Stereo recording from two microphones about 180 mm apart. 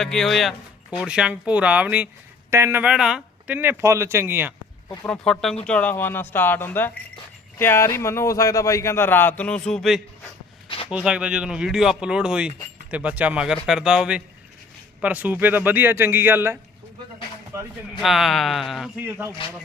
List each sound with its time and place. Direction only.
0.0 s speech: centre (ahead or behind)
5.0 s speech: 5° left (ahead or behind)
10.7 s a sound: 30° left (ahead or behind)
10.9 s speech: 5° right (ahead or behind)
18.0 s speech: centre (ahead or behind)
19.4 s speech: 30° left (ahead or behind)